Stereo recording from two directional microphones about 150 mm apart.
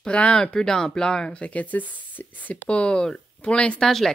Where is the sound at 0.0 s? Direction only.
5° left (ahead or behind).